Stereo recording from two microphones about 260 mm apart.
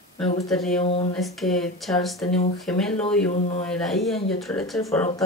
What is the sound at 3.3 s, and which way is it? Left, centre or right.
Speech, left.